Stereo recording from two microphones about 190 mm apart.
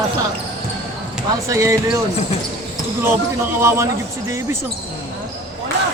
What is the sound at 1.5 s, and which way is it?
Speech, 15° right (ahead or behind).